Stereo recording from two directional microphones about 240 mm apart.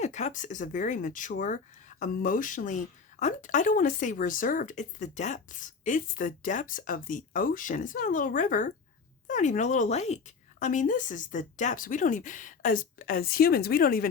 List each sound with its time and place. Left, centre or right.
0.0 s a woman's voice: left